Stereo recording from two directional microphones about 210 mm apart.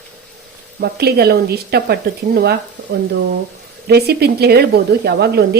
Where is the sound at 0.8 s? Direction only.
50° right (ahead or behind).